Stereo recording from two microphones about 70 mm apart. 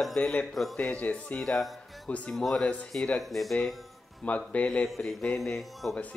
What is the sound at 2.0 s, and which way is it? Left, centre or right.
Speech, centre.